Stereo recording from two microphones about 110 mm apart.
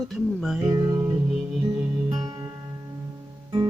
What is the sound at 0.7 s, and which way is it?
Music, 40° right (ahead or behind).